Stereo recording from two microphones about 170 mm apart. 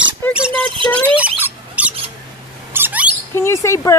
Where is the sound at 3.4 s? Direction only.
15° left (ahead or behind).